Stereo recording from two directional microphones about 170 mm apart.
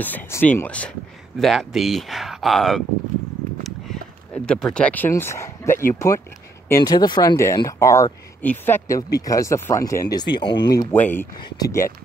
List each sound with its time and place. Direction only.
0.0 s speech: 10° left (ahead or behind)
3.6 s a sound: 5° left (ahead or behind)
5.9 s speech: 15° left (ahead or behind)
10.9 s speech: 10° left (ahead or behind)